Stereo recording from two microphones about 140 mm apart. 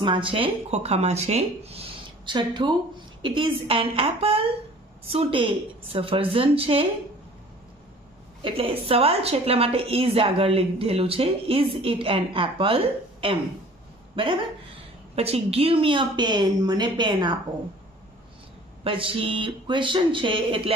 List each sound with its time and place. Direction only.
0.0 s a woman's voice: 35° right (ahead or behind)
8.4 s a woman's voice: 40° right (ahead or behind)
18.9 s a woman's voice: 40° right (ahead or behind)